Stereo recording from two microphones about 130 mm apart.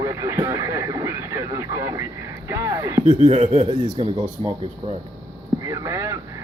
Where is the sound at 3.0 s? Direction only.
60° right (ahead or behind).